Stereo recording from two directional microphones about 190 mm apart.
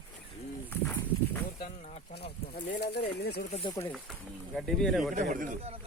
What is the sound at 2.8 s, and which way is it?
Speech, 60° left (ahead or behind).